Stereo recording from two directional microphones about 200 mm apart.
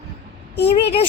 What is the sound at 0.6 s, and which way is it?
Child singing, 30° left (ahead or behind).